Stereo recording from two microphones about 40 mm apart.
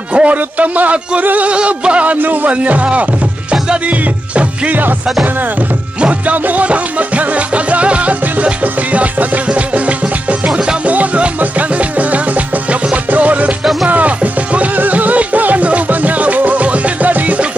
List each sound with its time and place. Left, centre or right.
0.1 s speech: right
1.5 s music: right
2.2 s speech: right
5.9 s music: right
12.9 s music: right